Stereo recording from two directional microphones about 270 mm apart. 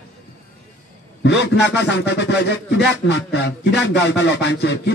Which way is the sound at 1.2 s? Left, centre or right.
Left.